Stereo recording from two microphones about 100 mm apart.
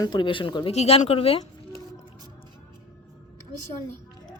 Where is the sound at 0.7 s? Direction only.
90° left.